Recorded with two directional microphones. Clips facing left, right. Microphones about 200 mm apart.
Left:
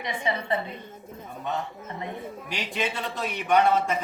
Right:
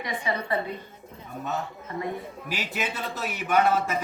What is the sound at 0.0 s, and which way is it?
Speech, 25° left (ahead or behind).